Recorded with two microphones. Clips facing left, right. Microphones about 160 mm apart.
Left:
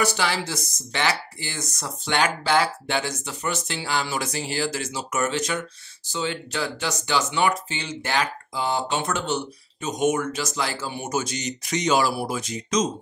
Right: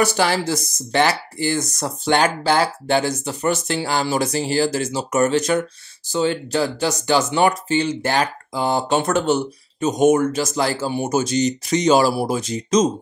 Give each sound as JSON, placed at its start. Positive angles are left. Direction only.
{"t": 0.0, "sound": "speech", "side_deg": -45}